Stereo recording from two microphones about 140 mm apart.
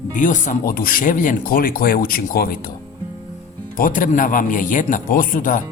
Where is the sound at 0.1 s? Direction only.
65° left (ahead or behind); by 2.6 s 90° left.